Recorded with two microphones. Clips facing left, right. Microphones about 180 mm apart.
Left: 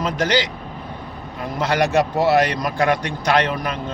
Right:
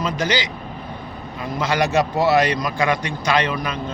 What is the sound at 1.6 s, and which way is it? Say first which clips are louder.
A man's voice: left 1 dB; 60° left (ahead or behind).